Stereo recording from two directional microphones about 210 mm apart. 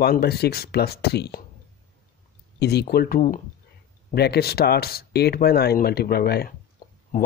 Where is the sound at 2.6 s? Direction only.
50° left (ahead or behind).